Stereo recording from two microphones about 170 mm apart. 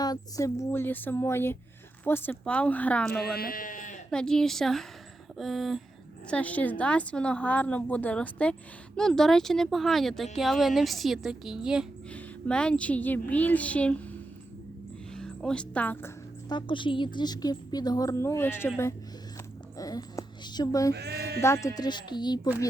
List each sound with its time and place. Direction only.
0.0 s a woman's voice: 20° left (ahead or behind); by 3.2 s 5° left (ahead or behind)
3.2 s speech: 60° left (ahead or behind)
4.1 s a woman's voice: 5° left (ahead or behind)
16.5 s a woman's voice: 30° left (ahead or behind)
20.9 s speech: 75° right (ahead or behind)
21.4 s a woman's voice: 15° left (ahead or behind)